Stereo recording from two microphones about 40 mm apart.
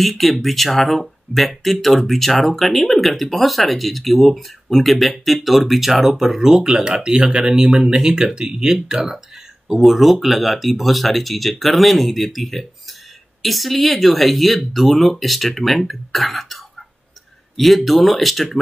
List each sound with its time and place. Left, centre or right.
0.0 s speech: centre